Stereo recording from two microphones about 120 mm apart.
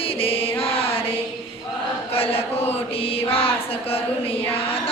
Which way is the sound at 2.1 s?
55° left (ahead or behind).